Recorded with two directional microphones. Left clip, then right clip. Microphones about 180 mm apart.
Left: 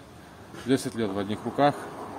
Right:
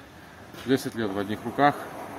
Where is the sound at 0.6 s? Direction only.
25° left (ahead or behind).